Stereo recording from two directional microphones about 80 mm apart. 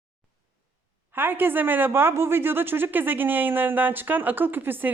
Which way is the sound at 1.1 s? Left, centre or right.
Right.